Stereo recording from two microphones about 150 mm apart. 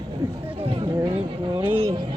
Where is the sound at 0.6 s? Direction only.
40° right (ahead or behind).